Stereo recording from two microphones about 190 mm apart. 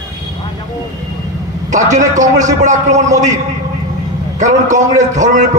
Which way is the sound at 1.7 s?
40° right (ahead or behind).